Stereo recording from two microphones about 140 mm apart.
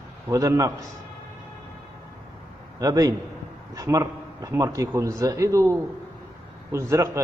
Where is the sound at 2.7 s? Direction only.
25° right (ahead or behind).